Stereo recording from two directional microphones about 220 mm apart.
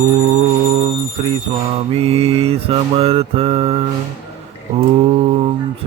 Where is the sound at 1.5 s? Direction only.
25° right (ahead or behind).